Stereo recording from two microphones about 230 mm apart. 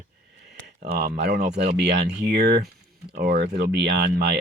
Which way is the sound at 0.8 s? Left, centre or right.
Right.